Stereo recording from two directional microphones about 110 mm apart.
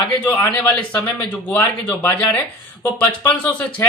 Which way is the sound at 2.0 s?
10° left (ahead or behind).